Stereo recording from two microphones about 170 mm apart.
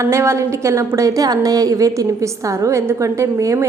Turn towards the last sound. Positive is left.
turn(degrees=-20)  # may be behind; listen again after turning